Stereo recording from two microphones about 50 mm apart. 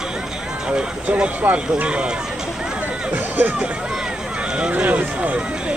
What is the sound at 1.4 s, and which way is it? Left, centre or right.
Speech, right.